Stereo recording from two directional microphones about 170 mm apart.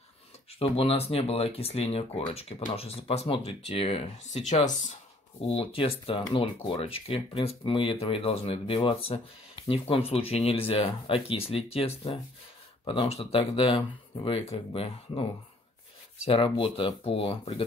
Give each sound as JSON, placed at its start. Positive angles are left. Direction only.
{"t": 0.6, "sound": "speech", "side_deg": 35}
{"t": 5.4, "sound": "speech", "side_deg": 35}
{"t": 16.3, "sound": "speech", "side_deg": 30}